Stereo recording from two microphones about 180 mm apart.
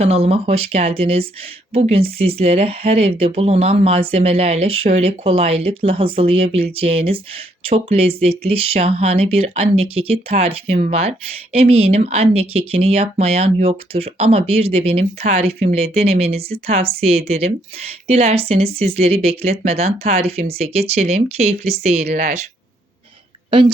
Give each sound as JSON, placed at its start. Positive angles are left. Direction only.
{"t": 0.0, "sound": "speech", "side_deg": -35}
{"t": 23.5, "sound": "a woman's voice", "side_deg": -30}